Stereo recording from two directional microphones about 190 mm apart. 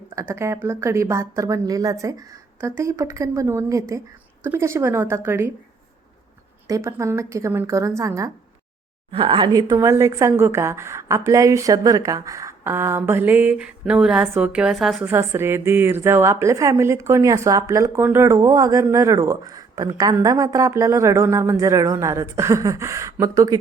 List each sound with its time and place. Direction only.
0.2 s a woman's voice: 15° right (ahead or behind)
6.7 s a woman's voice: 15° right (ahead or behind)
9.1 s a woman's voice: 25° right (ahead or behind); by 15.1 s centre (ahead or behind)
15.1 s a woman's voice: 15° right (ahead or behind)